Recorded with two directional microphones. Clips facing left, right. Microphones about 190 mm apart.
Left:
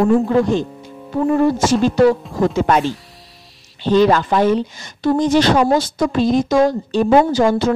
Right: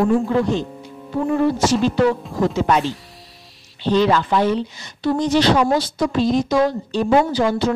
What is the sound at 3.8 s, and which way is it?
Speech, 45° left (ahead or behind).